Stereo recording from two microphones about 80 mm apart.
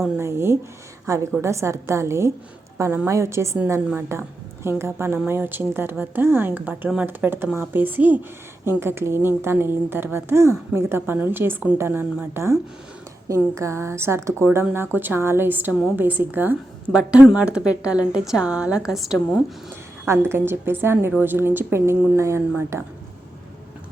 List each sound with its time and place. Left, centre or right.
0.2 s a woman's voice: right
16.9 s a woman's voice: centre
20.1 s a woman's voice: right